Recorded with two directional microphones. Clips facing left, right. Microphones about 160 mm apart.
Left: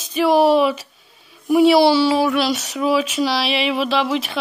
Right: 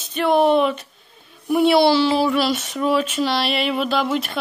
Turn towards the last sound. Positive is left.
turn(degrees=0)  # may be behind; listen again after turning